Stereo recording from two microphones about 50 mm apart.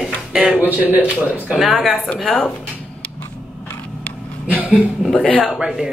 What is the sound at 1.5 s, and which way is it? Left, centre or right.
Speech, centre.